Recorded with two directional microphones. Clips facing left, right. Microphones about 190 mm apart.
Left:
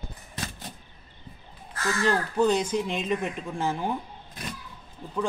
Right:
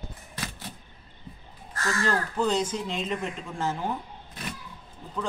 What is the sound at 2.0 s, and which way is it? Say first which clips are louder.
Speech: left 4 dB; 15° left (ahead or behind).